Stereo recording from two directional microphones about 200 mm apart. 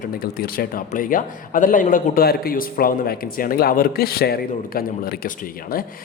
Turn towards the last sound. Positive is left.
turn(degrees=45)  # may be behind; listen again after turning